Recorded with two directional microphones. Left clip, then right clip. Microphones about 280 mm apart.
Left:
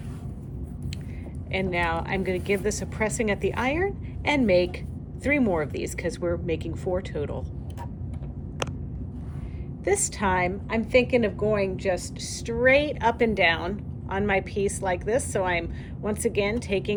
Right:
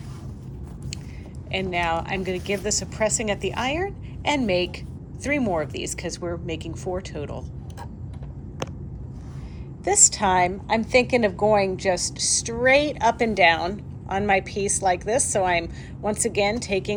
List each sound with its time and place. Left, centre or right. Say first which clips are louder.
1.5 s a woman's voice: right 2 dB; centre
9.8 s a woman's voice: right 5 dB; centre